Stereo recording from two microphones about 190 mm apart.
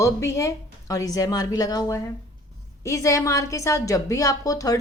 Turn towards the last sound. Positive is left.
turn(degrees=20)  # may be behind; listen again after turning